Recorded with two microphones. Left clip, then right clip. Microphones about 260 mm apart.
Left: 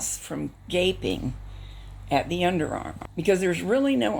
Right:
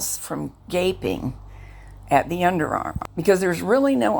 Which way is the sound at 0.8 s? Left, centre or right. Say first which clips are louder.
Right 2 dB; right.